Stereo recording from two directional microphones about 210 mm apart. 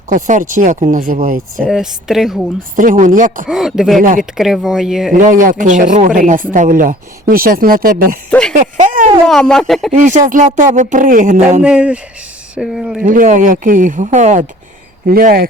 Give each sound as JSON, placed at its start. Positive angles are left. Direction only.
{"t": 0.1, "sound": "speech", "side_deg": -35}
{"t": 1.6, "sound": "speech", "side_deg": 0}
{"t": 2.7, "sound": "speech", "side_deg": -40}
{"t": 3.4, "sound": "speech", "side_deg": 0}
{"t": 5.1, "sound": "speech", "side_deg": -40}
{"t": 8.3, "sound": "speech", "side_deg": 5}
{"t": 8.5, "sound": "speech", "side_deg": -40}
{"t": 9.2, "sound": "speech", "side_deg": 5}
{"t": 9.9, "sound": "speech", "side_deg": -35}
{"t": 11.6, "sound": "speech", "side_deg": -5}
{"t": 13.0, "sound": "speech", "side_deg": -40}